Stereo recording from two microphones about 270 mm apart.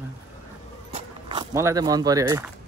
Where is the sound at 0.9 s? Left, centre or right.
Centre.